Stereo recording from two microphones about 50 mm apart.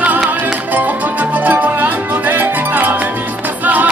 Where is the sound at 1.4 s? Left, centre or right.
Right.